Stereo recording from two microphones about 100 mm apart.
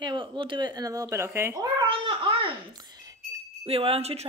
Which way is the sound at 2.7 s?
40° right (ahead or behind).